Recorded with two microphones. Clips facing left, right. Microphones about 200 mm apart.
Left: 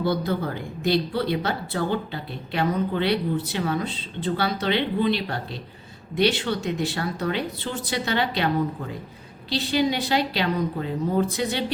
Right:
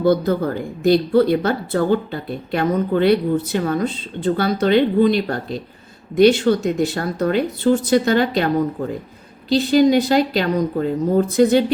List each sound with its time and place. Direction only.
0.0 s a woman's voice: 45° right (ahead or behind)
9.5 s a woman's voice: 45° right (ahead or behind)